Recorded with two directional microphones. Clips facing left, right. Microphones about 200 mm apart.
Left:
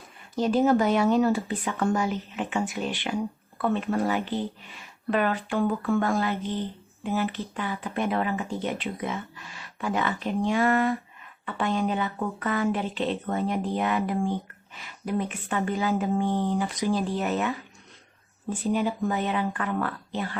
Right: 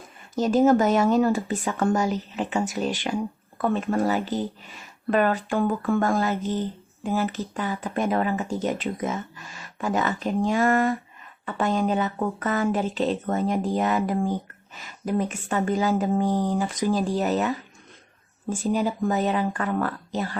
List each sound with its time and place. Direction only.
0.3 s speech: 45° right (ahead or behind)